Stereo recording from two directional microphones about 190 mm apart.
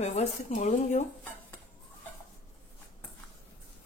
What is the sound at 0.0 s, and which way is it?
Speech, 35° left (ahead or behind).